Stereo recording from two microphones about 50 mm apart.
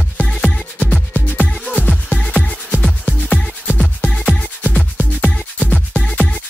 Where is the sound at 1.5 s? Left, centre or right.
Centre.